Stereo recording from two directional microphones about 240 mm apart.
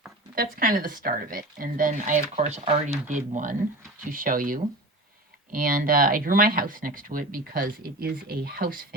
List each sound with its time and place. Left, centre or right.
0.3 s speech: right